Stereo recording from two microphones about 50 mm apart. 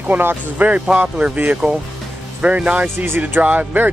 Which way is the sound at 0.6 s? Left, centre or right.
Right.